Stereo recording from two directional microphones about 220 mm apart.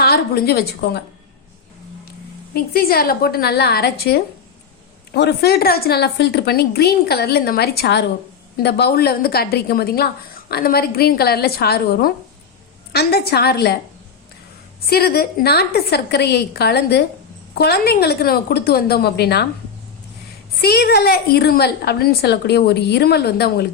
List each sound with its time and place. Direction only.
0.0 s a woman's voice: 45° left (ahead or behind)
2.5 s a woman's voice: 45° left (ahead or behind)
14.8 s a woman's voice: 45° left (ahead or behind)
20.6 s a woman's voice: 45° left (ahead or behind)